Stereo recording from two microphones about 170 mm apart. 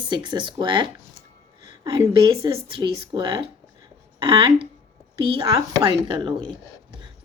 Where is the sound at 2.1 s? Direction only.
30° right (ahead or behind).